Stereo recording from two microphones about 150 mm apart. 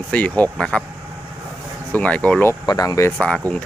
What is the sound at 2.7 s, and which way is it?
Speech, 25° left (ahead or behind).